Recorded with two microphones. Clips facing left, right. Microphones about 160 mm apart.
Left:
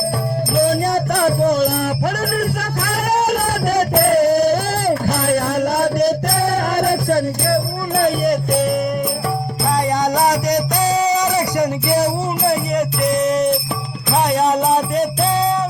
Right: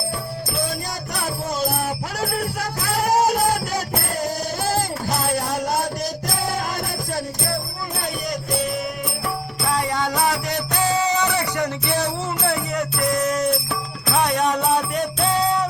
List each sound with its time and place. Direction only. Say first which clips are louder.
0.7 s music: left 12 dB; 60° left (ahead or behind)
9.6 s music: left 5 dB; 40° left (ahead or behind)
10.2 s music: left 7 dB; 15° left (ahead or behind)
10.9 s music: left 4 dB; 35° left (ahead or behind)
11.6 s music: left 6 dB; 10° left (ahead or behind)
12.0 s music: left 6 dB; 30° left (ahead or behind)